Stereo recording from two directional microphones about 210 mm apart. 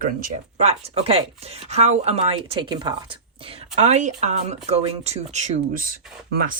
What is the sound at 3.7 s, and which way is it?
Speech, 35° right (ahead or behind).